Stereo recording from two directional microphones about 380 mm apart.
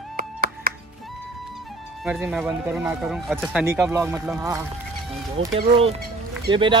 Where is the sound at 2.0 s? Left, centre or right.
Centre.